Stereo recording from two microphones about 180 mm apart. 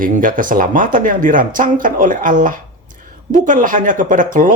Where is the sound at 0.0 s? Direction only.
50° right (ahead or behind).